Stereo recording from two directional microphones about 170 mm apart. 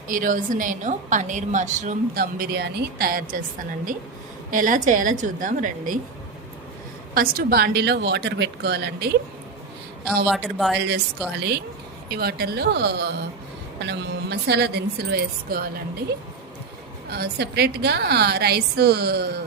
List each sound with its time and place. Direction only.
0.1 s a woman's voice: 50° right (ahead or behind)
2.1 s speech: 65° right (ahead or behind)
4.5 s a woman's voice: 50° right (ahead or behind)
7.1 s a woman's voice: 60° right (ahead or behind); by 9.1 s 75° right (ahead or behind)
10.2 s speech: centre (ahead or behind)
10.8 s speech: 85° right
11.3 s a woman's voice: 70° right (ahead or behind)
17.1 s a woman's voice: 70° right (ahead or behind)